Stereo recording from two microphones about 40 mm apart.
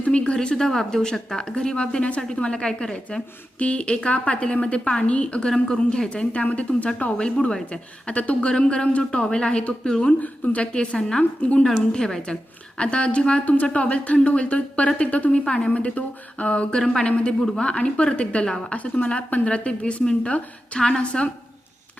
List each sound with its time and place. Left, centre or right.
0.0 s speech: left
0.3 s a woman's voice: centre
5.5 s a woman's voice: centre
6.4 s a woman's voice: left
10.2 s speech: left
10.7 s speech: centre
11.2 s speech: left
11.9 s a woman's voice: centre